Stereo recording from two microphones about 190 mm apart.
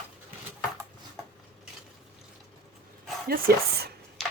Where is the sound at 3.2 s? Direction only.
55° right (ahead or behind).